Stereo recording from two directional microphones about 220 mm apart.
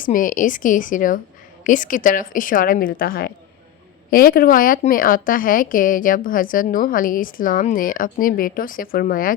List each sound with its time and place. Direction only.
0.0 s a woman's voice: 35° left (ahead or behind)